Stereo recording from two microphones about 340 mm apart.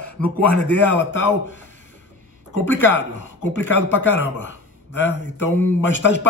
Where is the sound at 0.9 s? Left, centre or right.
Left.